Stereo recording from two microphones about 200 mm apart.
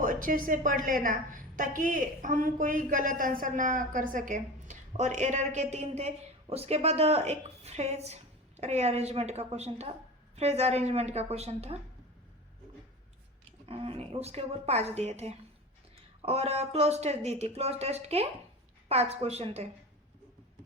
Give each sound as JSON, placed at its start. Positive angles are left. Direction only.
{"t": 0.0, "sound": "a woman's voice", "side_deg": -40}
{"t": 13.7, "sound": "a woman's voice", "side_deg": -30}